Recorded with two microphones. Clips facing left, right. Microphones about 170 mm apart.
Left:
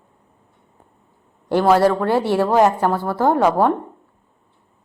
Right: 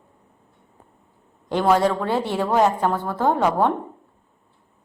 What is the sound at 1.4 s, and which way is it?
A woman's voice, 5° left (ahead or behind).